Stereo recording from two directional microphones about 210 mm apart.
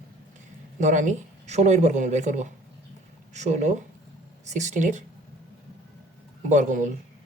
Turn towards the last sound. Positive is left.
turn(degrees=-35)  # may be behind; listen again after turning